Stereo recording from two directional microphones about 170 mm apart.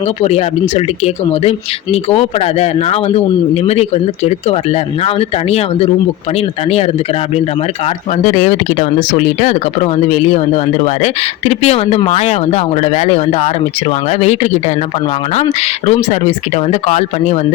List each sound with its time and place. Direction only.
0.2 s speech: 40° left (ahead or behind)
8.3 s speech: 40° left (ahead or behind)